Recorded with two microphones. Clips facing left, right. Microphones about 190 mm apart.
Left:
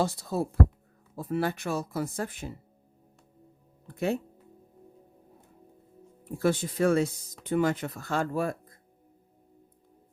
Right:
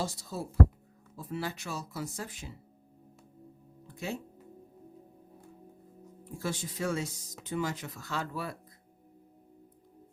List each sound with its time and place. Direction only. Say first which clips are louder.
0.0 s speech: left 8 dB; 60° left (ahead or behind)
3.8 s speech: left 9 dB; 60° left (ahead or behind)
6.2 s speech: left 10 dB; 60° left (ahead or behind)